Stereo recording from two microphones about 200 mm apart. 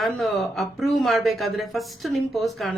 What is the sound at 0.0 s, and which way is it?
Speech, centre (ahead or behind).